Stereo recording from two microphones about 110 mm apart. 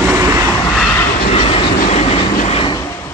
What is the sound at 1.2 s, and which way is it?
Train, 70° left (ahead or behind).